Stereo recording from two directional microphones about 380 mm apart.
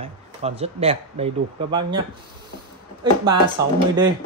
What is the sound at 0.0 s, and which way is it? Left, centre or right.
Speech, centre.